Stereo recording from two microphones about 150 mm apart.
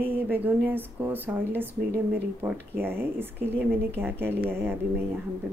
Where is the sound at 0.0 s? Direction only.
15° right (ahead or behind).